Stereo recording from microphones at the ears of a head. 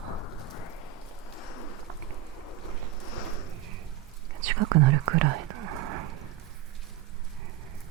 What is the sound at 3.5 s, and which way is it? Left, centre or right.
Whispering, right.